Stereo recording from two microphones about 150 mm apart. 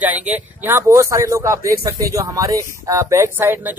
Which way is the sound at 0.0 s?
10° right (ahead or behind).